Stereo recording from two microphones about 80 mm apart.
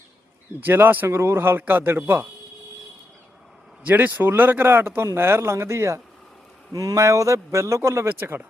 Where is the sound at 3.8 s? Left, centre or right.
Right.